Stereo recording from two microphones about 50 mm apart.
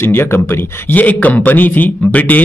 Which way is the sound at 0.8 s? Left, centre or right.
Left.